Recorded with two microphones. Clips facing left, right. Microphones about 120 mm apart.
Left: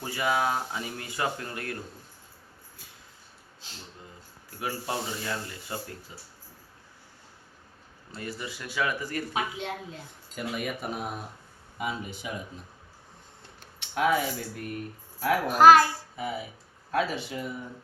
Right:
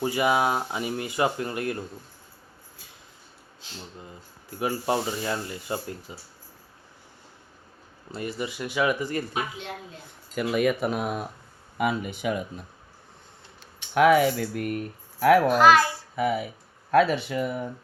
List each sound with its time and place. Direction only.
0.0 s speech: 15° right (ahead or behind)
4.6 s speech: 25° right (ahead or behind)
8.1 s speech: 20° right (ahead or behind)
10.3 s speech: 85° right
11.8 s speech: 65° right (ahead or behind)
13.9 s speech: 80° right
15.5 s a child's voice: 40° left (ahead or behind)
16.1 s speech: 70° right (ahead or behind)